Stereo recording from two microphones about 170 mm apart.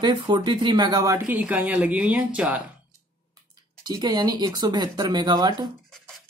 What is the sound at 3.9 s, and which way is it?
Speech, 25° right (ahead or behind).